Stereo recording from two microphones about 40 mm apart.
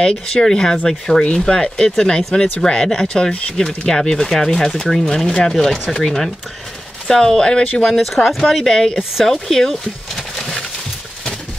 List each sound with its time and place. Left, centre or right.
0.0 s speech: centre
7.8 s speech: centre